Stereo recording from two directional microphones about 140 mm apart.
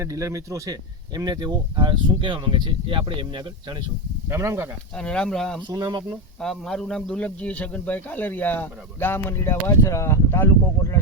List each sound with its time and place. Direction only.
0.0 s speech: 25° right (ahead or behind)
4.3 s speech: 20° right (ahead or behind)
4.9 s speech: 5° left (ahead or behind)
5.6 s speech: 30° right (ahead or behind)
6.4 s a man's voice: 5° left (ahead or behind); by 11.0 s 20° left (ahead or behind)